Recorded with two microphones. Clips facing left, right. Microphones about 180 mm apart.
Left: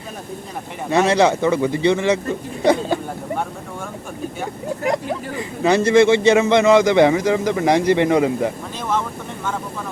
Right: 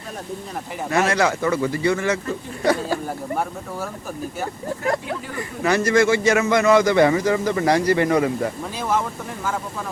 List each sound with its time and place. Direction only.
0.9 s a man's voice: 25° left (ahead or behind)
5.4 s a man's voice: 25° left (ahead or behind)
8.8 s speech: 10° right (ahead or behind)